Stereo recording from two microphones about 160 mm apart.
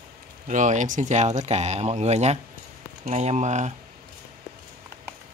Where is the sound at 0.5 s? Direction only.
50° right (ahead or behind).